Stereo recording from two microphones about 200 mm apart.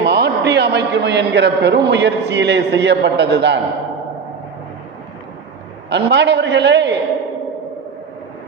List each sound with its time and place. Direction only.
0.0 s a man's voice: 55° right (ahead or behind)
5.9 s a man's voice: 60° right (ahead or behind)